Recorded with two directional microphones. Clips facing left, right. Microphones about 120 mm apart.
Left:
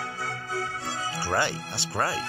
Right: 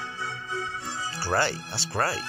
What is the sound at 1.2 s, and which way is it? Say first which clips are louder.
Speech: right 2 dB; 15° left (ahead or behind).